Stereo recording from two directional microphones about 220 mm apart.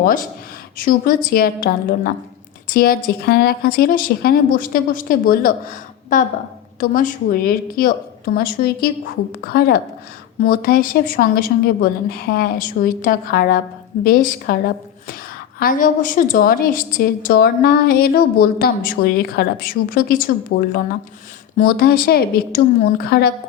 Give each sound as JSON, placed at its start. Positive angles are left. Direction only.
{"t": 0.0, "sound": "a woman's voice", "side_deg": 40}